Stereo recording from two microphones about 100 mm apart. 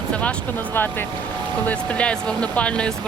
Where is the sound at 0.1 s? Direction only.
10° left (ahead or behind).